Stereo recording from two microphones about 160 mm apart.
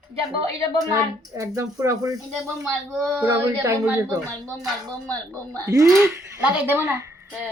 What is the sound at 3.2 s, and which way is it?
Speech, 15° right (ahead or behind).